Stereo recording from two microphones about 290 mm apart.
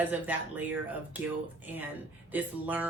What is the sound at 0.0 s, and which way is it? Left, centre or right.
A woman's voice, centre.